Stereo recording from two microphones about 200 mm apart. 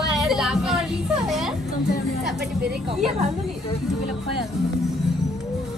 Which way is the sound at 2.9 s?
30° right (ahead or behind).